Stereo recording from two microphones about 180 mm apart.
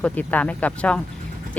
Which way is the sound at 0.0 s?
10° left (ahead or behind).